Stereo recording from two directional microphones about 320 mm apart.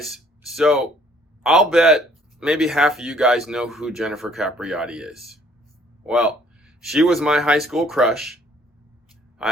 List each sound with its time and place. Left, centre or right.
0.0 s speech: centre